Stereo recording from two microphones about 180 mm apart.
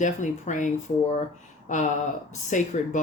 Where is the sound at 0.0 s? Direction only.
45° left (ahead or behind).